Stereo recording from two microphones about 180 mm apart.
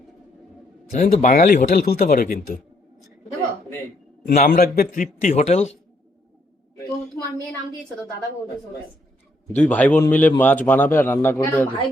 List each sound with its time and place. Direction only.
0.9 s a man's voice: 45° left (ahead or behind)
4.4 s a man's voice: 50° left (ahead or behind)
9.6 s a man's voice: 10° left (ahead or behind)